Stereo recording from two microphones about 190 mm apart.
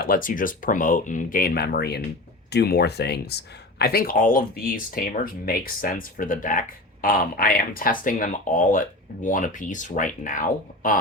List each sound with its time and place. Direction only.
0.0 s speech: 45° left (ahead or behind)